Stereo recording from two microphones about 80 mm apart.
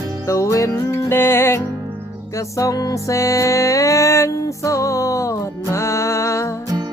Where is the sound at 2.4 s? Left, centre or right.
Left.